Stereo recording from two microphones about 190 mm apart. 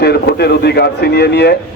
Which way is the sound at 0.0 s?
60° left (ahead or behind).